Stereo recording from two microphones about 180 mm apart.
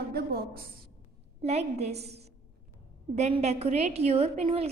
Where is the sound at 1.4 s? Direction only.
35° right (ahead or behind).